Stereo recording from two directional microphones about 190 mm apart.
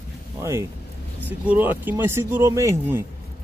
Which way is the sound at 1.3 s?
10° right (ahead or behind).